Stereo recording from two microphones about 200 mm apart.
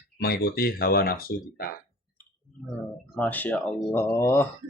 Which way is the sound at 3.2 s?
10° left (ahead or behind).